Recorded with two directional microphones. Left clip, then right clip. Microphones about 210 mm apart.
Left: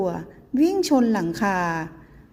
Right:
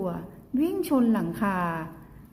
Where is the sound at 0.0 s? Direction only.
30° left (ahead or behind).